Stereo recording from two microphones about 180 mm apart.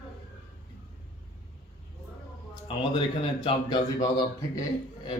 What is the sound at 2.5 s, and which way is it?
Speech, 30° left (ahead or behind).